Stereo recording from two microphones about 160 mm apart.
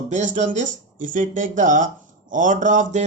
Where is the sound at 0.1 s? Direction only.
50° right (ahead or behind).